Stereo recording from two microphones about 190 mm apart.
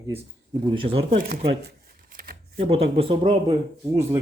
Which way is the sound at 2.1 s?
50° right (ahead or behind).